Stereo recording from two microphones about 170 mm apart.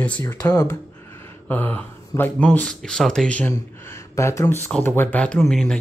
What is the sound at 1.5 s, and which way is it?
Speech, 10° left (ahead or behind).